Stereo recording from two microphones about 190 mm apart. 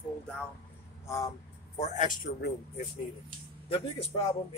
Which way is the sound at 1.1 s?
20° left (ahead or behind).